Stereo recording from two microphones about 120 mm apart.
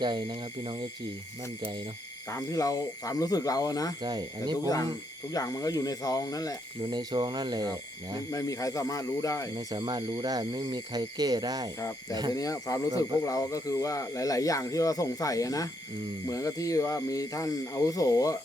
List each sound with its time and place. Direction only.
0.0 s speech: 40° right (ahead or behind)
2.3 s speech: 30° left (ahead or behind)
4.0 s speech: 35° right (ahead or behind)
5.3 s speech: 30° left (ahead or behind)
6.8 s speech: 35° right (ahead or behind)
8.3 s speech: 30° left (ahead or behind)
9.6 s speech: 35° right (ahead or behind)
12.3 s speech: 30° left (ahead or behind)